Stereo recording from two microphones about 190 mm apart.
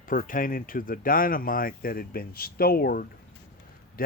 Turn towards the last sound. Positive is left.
turn(degrees=50)  # may be behind; listen again after turning